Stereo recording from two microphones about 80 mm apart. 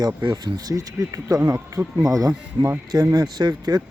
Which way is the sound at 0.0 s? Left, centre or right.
Right.